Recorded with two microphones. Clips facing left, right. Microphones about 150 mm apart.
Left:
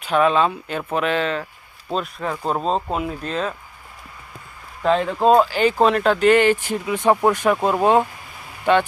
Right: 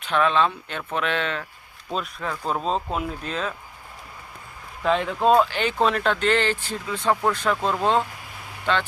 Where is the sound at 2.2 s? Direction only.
30° left (ahead or behind).